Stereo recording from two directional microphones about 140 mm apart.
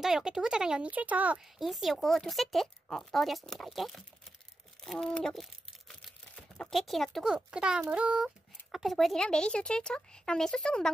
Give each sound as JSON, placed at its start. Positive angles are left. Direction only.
{"t": 0.0, "sound": "speech", "side_deg": -5}